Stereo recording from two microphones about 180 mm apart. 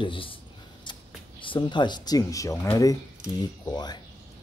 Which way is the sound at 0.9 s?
25° left (ahead or behind).